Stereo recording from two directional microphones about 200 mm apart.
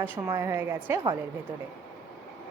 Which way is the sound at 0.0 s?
10° right (ahead or behind).